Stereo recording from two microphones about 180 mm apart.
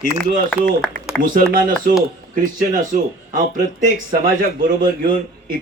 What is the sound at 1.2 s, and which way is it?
Speech, 50° right (ahead or behind).